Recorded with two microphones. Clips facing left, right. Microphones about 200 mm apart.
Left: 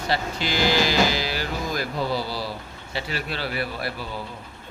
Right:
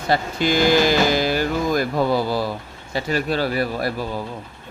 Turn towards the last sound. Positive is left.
turn(degrees=-45)  # may be behind; listen again after turning